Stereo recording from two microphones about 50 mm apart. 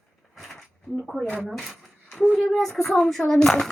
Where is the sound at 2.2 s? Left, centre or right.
Centre.